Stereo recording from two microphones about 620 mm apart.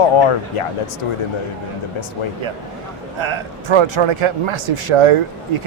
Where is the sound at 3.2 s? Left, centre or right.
Right.